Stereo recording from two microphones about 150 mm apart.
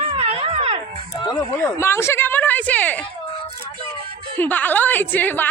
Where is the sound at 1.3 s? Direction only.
20° left (ahead or behind).